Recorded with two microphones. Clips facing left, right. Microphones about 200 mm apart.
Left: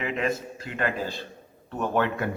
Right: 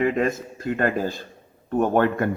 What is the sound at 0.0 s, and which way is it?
A man's voice, 45° right (ahead or behind).